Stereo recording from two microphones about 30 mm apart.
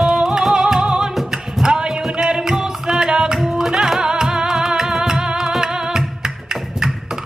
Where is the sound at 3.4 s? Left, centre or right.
Centre.